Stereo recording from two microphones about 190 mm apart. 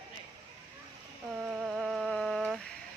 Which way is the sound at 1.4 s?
5° right (ahead or behind).